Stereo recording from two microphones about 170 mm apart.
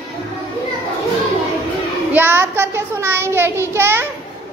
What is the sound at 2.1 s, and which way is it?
Child singing, 10° right (ahead or behind).